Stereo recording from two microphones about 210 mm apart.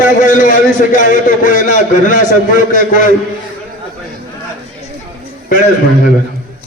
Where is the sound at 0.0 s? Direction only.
40° left (ahead or behind).